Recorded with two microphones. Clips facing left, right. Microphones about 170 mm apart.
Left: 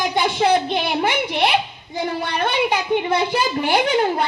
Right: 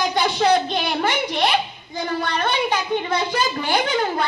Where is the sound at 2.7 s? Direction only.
15° left (ahead or behind).